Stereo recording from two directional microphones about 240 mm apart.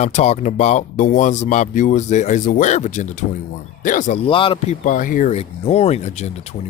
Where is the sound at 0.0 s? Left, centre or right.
Left.